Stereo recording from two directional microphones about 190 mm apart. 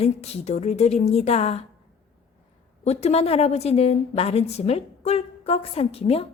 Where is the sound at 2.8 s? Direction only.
35° left (ahead or behind).